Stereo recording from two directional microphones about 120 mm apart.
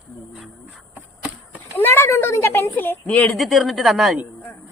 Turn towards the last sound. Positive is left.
turn(degrees=0)  # may be behind; listen again after turning